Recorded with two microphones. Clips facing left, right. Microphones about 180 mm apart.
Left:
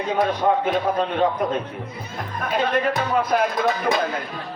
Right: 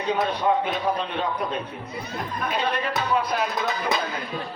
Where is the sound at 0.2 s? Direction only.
50° left (ahead or behind).